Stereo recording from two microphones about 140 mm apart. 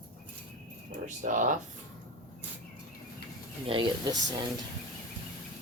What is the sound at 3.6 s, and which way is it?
Speech, 40° right (ahead or behind).